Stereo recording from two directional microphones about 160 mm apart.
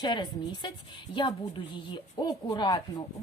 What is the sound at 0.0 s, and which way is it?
A woman's voice, 30° left (ahead or behind).